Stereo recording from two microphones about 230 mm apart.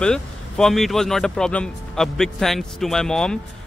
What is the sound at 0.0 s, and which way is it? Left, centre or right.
Speech, centre.